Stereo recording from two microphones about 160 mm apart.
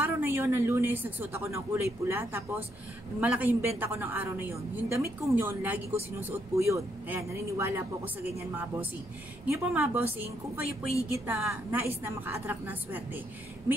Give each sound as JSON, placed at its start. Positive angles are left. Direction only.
{"t": 0.0, "sound": "a woman's voice", "side_deg": -15}
{"t": 9.5, "sound": "a woman's voice", "side_deg": -15}
{"t": 11.8, "sound": "a woman's voice", "side_deg": -15}